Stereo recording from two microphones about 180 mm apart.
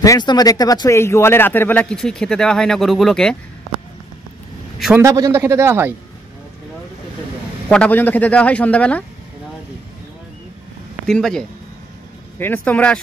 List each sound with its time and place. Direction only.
0.0 s speech: 20° left (ahead or behind); by 3.3 s centre (ahead or behind)
4.7 s a man's voice: centre (ahead or behind)
5.0 s a man's voice: 20° right (ahead or behind)
7.6 s speech: 5° left (ahead or behind)
11.1 s speech: 5° left (ahead or behind)